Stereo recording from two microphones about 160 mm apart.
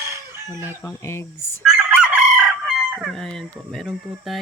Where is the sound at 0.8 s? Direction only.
15° left (ahead or behind).